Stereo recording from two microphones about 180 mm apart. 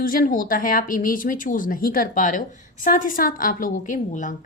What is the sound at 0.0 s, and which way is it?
A woman's voice, 50° left (ahead or behind).